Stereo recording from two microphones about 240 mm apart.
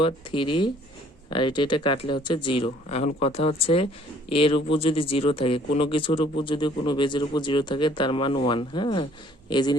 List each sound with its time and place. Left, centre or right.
0.0 s speech: left